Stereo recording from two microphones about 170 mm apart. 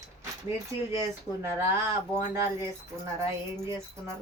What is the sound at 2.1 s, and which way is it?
Speech, 15° right (ahead or behind).